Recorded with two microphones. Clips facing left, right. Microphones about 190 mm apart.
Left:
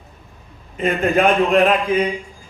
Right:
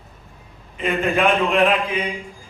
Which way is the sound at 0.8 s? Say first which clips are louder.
Left 3 dB; 40° left (ahead or behind).